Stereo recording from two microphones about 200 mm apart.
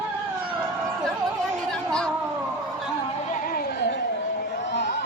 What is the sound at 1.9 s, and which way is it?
Cat, 5° left (ahead or behind).